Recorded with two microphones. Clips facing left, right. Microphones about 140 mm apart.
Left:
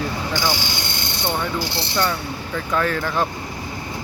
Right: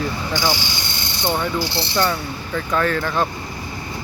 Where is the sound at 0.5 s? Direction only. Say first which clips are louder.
Even; 55° left (ahead or behind).